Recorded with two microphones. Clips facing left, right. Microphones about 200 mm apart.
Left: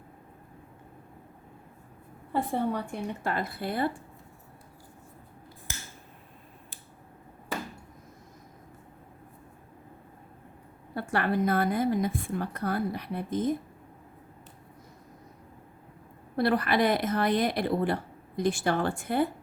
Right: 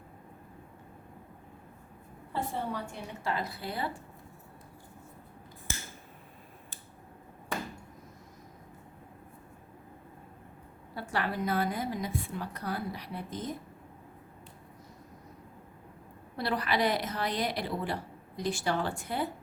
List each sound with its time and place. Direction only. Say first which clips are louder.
2.3 s a woman's voice: left 6 dB; 55° left (ahead or behind)
10.9 s a woman's voice: left 6 dB; 55° left (ahead or behind)
16.4 s a woman's voice: left 5 dB; 55° left (ahead or behind)